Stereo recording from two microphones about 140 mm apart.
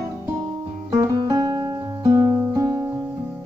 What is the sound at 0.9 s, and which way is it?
Music, 30° right (ahead or behind).